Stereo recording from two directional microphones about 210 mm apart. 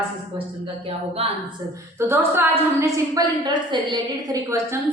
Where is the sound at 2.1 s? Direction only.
10° right (ahead or behind).